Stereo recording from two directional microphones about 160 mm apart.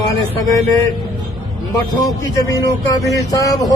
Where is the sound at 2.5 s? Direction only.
20° left (ahead or behind).